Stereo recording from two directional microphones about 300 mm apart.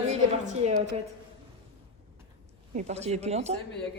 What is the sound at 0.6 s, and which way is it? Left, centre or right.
Speech, right.